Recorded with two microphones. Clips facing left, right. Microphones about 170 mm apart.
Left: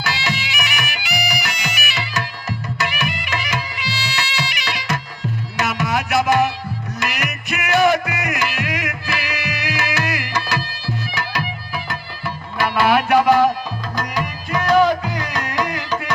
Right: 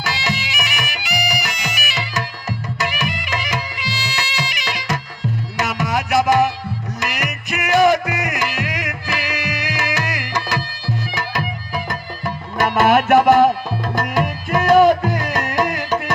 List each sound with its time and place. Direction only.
0.0 s music: 40° right (ahead or behind)